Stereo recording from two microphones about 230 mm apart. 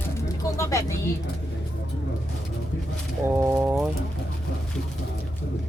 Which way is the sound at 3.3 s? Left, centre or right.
Centre.